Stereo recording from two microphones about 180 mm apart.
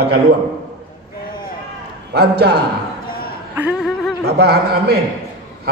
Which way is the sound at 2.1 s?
65° right (ahead or behind).